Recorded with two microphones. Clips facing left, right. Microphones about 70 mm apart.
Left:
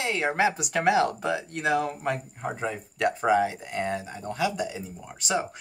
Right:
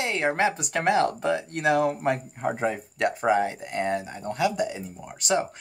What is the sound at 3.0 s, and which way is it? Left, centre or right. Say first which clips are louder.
Speech: even; centre.